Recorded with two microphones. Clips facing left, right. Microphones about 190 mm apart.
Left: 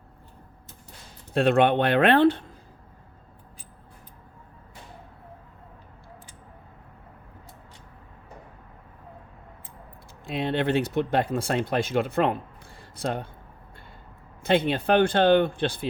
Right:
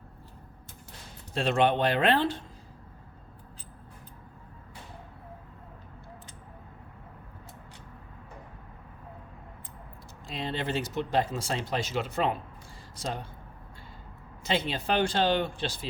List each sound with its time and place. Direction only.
1.3 s speech: 60° left (ahead or behind)
10.2 s speech: 60° left (ahead or behind)
14.4 s speech: 60° left (ahead or behind)